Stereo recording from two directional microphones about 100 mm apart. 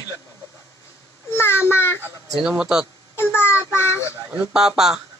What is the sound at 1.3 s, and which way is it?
Speech, 25° left (ahead or behind).